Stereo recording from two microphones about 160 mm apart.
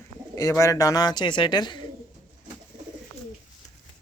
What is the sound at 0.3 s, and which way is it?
Speech, 20° left (ahead or behind).